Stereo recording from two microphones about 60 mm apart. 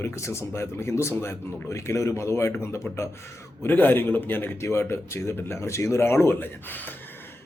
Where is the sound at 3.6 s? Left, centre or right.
Left.